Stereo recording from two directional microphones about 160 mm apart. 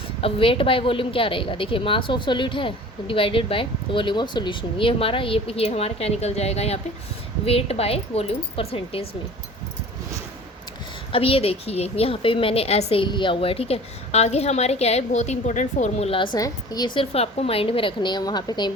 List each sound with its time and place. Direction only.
0.2 s a woman's voice: 35° left (ahead or behind)
11.1 s a woman's voice: 35° left (ahead or behind)